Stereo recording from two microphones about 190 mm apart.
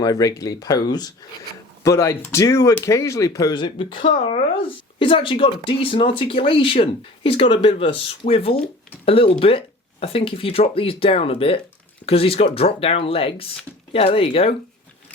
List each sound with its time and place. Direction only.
0.0 s speech: 20° left (ahead or behind)